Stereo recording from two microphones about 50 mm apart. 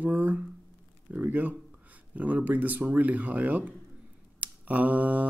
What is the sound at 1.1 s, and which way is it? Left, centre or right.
Speech, right.